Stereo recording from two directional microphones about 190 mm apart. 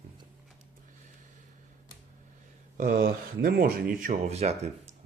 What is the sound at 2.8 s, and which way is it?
Speech, 50° right (ahead or behind).